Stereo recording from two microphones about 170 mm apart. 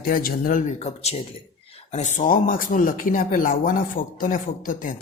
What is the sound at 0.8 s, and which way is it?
Speech, 40° left (ahead or behind).